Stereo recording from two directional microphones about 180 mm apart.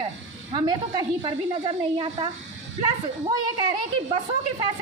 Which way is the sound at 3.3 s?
25° right (ahead or behind).